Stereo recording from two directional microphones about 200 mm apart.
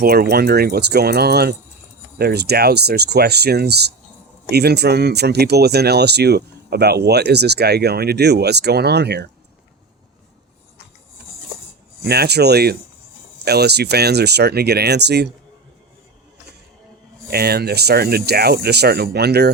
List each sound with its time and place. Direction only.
0.0 s speech: 50° right (ahead or behind)
12.0 s speech: 55° right (ahead or behind)
17.3 s speech: 50° right (ahead or behind)